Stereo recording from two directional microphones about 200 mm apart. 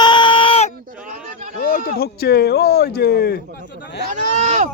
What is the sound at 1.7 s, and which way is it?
Speech, 45° left (ahead or behind).